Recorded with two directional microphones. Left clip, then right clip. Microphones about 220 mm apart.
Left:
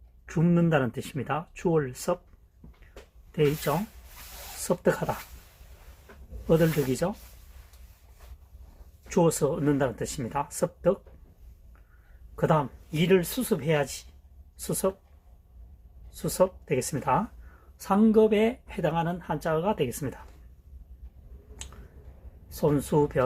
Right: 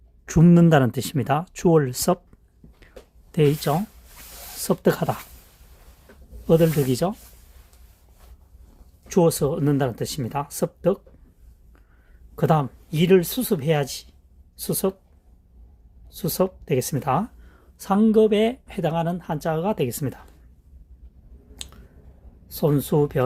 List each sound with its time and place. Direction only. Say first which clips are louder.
0.3 s speech: right 8 dB; 55° right (ahead or behind)
3.3 s speech: right 5 dB; 55° right (ahead or behind)
6.5 s speech: right 5 dB; 50° right (ahead or behind)
9.0 s speech: right 4 dB; 45° right (ahead or behind)
12.4 s speech: right 3 dB; 50° right (ahead or behind)
16.0 s speech: right 1 dB; 45° right (ahead or behind)
21.6 s finger snapping: right 7 dB; 50° right (ahead or behind)
22.4 s speech: right 3 dB; 50° right (ahead or behind)